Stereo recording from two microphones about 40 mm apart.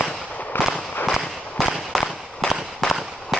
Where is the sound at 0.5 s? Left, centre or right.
Left.